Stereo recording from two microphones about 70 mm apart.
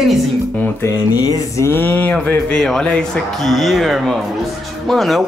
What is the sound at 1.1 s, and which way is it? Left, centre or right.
Music, left.